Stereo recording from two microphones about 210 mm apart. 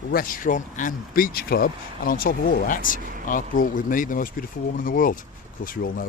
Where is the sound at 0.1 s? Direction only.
40° left (ahead or behind).